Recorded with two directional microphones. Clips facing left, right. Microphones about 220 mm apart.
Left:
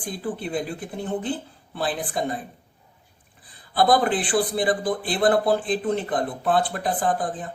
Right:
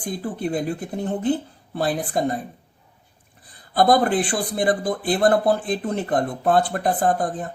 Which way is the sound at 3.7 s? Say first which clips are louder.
Right 2 dB; 45° right (ahead or behind).